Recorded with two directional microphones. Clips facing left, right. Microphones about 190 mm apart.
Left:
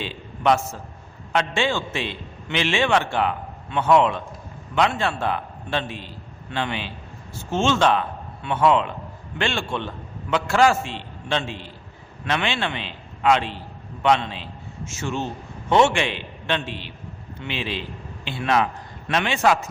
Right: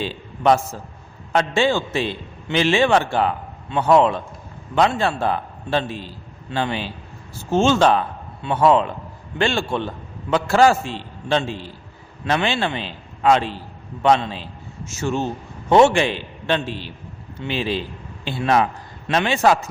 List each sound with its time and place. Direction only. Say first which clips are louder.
0.0 s a man's voice: right 3 dB; 35° right (ahead or behind)